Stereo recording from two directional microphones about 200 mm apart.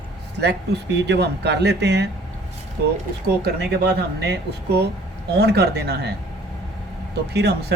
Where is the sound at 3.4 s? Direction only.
55° right (ahead or behind).